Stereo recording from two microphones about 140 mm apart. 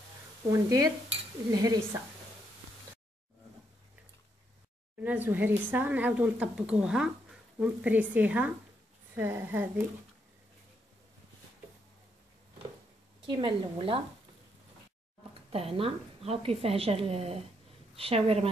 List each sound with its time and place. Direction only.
0.5 s speech: 25° right (ahead or behind)
5.0 s a woman's voice: 10° right (ahead or behind)
13.3 s a woman's voice: 35° right (ahead or behind)
15.5 s a woman's voice: 45° right (ahead or behind)